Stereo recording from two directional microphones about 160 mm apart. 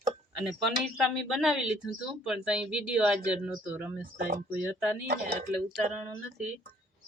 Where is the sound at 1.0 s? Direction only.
Centre (ahead or behind).